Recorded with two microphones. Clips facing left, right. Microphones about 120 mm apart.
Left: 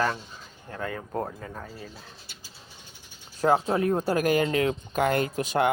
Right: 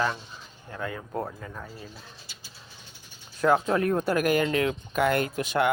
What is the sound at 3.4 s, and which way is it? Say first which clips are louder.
Speech: even; 30° left (ahead or behind).